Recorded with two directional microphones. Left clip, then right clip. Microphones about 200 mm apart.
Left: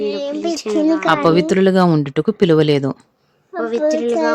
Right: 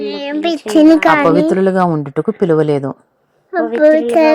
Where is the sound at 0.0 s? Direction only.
20° right (ahead or behind).